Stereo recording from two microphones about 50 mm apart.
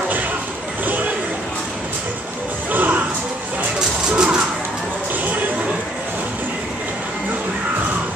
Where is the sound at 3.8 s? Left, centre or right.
Centre.